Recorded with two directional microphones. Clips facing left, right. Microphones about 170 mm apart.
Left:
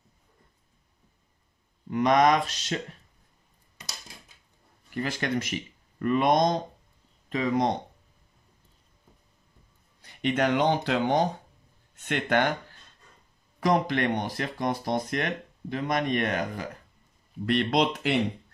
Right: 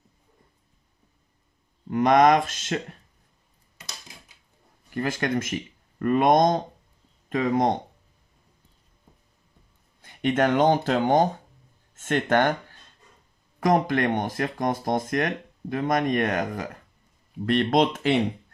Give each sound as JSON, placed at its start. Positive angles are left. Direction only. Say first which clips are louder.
{"t": 1.9, "sound": "speech", "louder": "right 3 dB", "side_deg": -45}
{"t": 4.9, "sound": "speech", "louder": "right 3 dB", "side_deg": -45}
{"t": 10.0, "sound": "speech", "louder": "right 3 dB", "side_deg": -50}
{"t": 13.6, "sound": "speech", "louder": "right 3 dB", "side_deg": -50}